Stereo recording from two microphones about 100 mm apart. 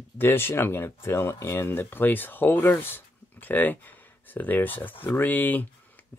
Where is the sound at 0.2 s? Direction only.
25° left (ahead or behind).